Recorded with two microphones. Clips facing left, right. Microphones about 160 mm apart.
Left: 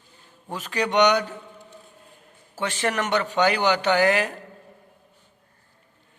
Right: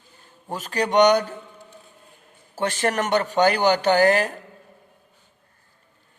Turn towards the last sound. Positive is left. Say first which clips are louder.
# right 3 dB
turn(degrees=-40)  # may be behind; listen again after turning